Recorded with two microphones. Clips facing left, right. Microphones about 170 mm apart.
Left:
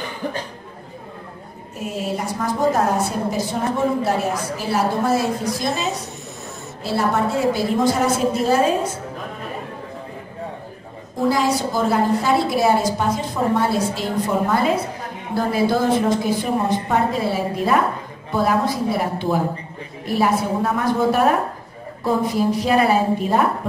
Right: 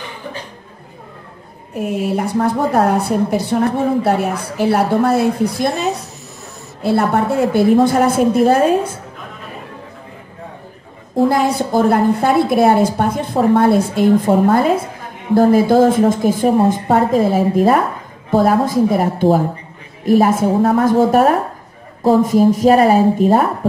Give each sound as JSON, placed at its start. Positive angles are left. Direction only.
{"t": 1.8, "sound": "a woman's voice", "side_deg": -60}
{"t": 11.2, "sound": "a woman's voice", "side_deg": -55}